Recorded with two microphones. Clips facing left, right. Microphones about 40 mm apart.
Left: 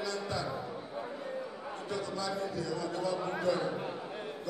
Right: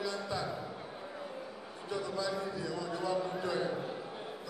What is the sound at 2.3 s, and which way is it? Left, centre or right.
Speech, right.